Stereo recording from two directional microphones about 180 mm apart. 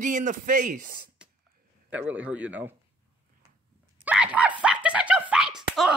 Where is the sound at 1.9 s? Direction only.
10° right (ahead or behind).